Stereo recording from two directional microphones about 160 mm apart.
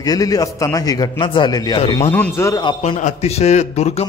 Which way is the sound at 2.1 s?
15° left (ahead or behind).